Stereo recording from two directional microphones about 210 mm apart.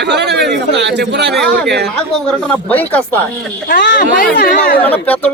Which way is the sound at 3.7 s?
55° left (ahead or behind).